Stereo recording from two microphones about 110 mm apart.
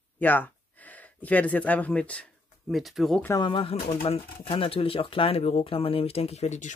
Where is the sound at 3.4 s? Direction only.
50° left (ahead or behind).